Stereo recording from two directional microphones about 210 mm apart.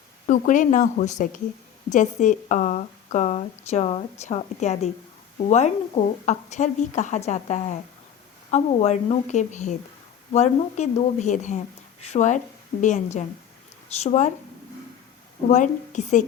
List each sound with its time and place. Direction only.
0.3 s a woman's voice: 40° left (ahead or behind)
15.4 s a woman's voice: 35° left (ahead or behind)